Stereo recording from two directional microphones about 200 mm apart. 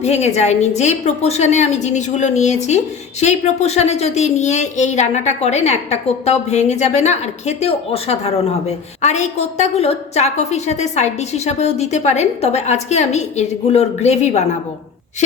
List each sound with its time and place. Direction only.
0.0 s a woman's voice: 35° left (ahead or behind)